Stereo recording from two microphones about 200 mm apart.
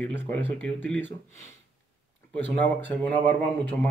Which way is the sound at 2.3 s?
10° left (ahead or behind).